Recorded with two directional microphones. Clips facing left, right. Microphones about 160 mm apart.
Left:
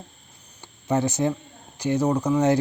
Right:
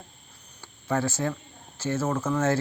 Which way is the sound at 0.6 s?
20° left (ahead or behind).